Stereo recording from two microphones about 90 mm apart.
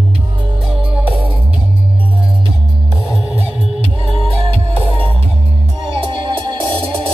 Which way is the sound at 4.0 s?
80° right.